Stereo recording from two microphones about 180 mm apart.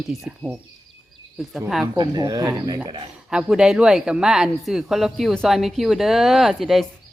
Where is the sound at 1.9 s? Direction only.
25° right (ahead or behind).